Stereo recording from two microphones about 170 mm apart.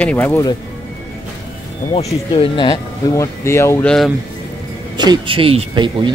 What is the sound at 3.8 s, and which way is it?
Speech, 5° left (ahead or behind).